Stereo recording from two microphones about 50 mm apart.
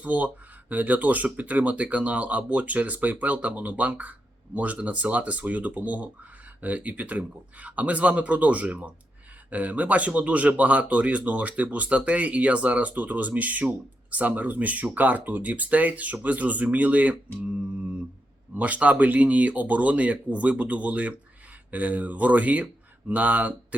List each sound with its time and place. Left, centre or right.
0.0 s speech: right
18.5 s speech: right